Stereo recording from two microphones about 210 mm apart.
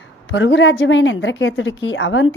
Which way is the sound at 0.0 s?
60° left (ahead or behind).